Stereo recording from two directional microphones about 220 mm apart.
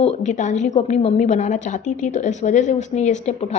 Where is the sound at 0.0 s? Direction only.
30° left (ahead or behind).